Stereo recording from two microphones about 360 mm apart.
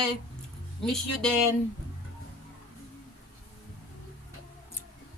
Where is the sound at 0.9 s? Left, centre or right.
Centre.